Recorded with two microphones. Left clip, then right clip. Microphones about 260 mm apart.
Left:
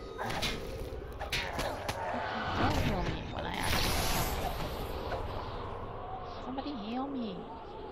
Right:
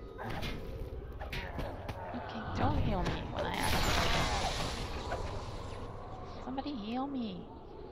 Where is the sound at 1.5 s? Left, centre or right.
Left.